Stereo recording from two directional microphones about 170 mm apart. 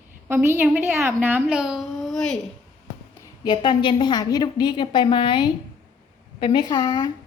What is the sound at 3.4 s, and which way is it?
A woman's voice, 25° left (ahead or behind).